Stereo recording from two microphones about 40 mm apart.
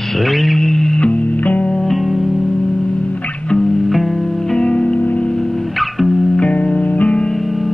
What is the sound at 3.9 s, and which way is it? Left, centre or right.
Music, centre.